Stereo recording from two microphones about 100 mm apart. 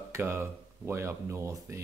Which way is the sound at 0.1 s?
25° right (ahead or behind).